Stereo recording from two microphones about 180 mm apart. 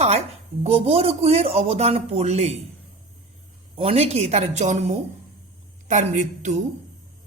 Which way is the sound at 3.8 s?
35° right (ahead or behind).